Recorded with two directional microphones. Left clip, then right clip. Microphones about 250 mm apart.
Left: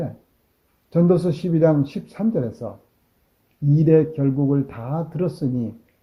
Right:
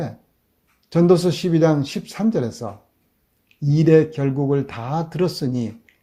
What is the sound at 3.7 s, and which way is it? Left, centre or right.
Speech, right.